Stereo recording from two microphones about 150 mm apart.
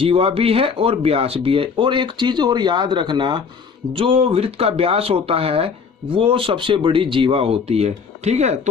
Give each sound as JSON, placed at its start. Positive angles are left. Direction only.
{"t": 0.0, "sound": "speech", "side_deg": -40}